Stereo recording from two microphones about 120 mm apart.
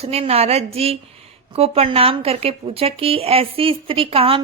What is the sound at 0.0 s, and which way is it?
A woman's voice, 55° right (ahead or behind).